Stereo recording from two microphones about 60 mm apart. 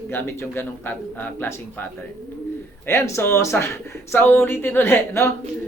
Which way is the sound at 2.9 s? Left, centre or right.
Left.